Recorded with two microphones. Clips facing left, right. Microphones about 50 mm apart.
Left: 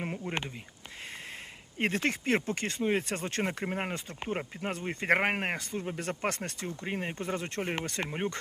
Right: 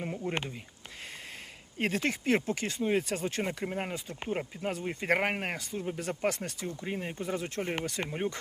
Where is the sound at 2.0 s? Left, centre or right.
Left.